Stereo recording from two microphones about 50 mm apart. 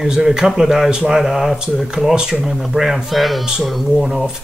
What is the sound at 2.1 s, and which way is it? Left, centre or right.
Speech, centre.